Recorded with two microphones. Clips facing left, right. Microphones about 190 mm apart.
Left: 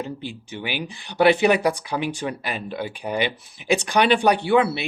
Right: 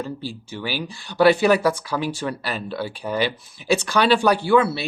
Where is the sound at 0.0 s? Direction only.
20° left (ahead or behind).